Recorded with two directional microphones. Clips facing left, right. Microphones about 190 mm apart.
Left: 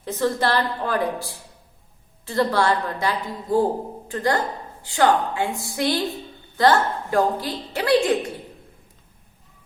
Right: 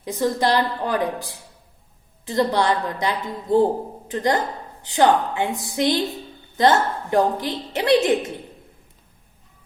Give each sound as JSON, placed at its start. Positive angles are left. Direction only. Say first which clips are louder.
{"t": 0.0, "sound": "a woman's voice", "louder": "right 1 dB", "side_deg": -15}